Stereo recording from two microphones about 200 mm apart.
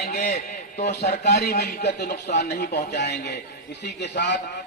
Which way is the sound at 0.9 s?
55° left (ahead or behind).